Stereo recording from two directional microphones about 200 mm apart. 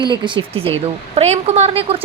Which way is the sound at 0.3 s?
25° right (ahead or behind).